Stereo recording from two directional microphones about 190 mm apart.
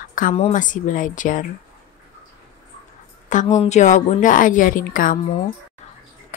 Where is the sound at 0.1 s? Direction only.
45° left (ahead or behind).